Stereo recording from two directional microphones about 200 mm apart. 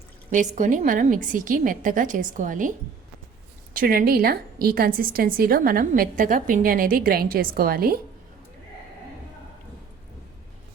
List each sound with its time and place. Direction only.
0.3 s a woman's voice: 40° right (ahead or behind)
3.8 s a woman's voice: 45° right (ahead or behind)